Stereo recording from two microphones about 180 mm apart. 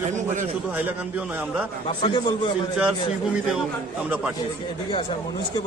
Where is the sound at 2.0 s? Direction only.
25° left (ahead or behind).